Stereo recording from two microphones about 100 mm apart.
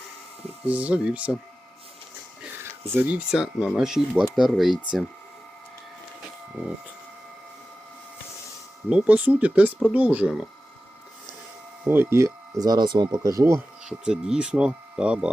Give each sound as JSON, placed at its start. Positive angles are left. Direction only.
{"t": 0.6, "sound": "speech", "side_deg": -15}
{"t": 2.9, "sound": "speech", "side_deg": -20}
{"t": 3.3, "sound": "speech", "side_deg": -5}
{"t": 8.9, "sound": "speech", "side_deg": -10}
{"t": 11.9, "sound": "speech", "side_deg": -25}
{"t": 12.6, "sound": "speech", "side_deg": -45}
{"t": 13.8, "sound": "speech", "side_deg": -5}